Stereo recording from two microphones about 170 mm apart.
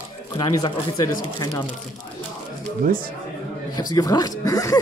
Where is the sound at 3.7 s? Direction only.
20° left (ahead or behind).